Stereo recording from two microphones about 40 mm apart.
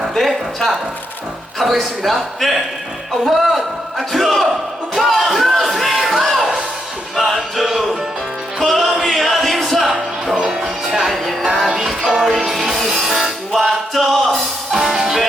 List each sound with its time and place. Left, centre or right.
0.1 s a sound: centre
1.5 s a man's voice: centre
4.9 s music: centre
10.3 s music: centre
10.6 s music: centre
13.5 s music: centre
14.7 s music: centre